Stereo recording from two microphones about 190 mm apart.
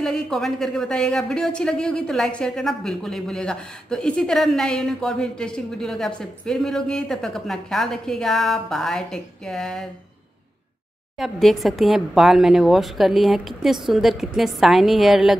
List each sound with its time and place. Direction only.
0.0 s speech: centre (ahead or behind)
11.1 s speech: centre (ahead or behind)